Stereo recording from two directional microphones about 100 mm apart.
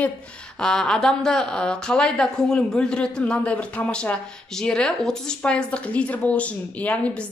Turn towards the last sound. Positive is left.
turn(degrees=10)  # may be behind; listen again after turning